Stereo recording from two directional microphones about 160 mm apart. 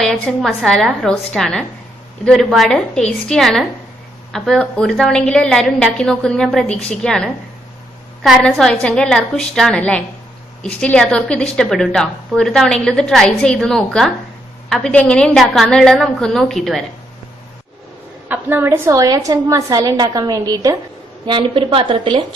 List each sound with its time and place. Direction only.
0.0 s a woman's voice: centre (ahead or behind)
18.3 s a woman's voice: 10° right (ahead or behind); by 22.2 s 35° right (ahead or behind)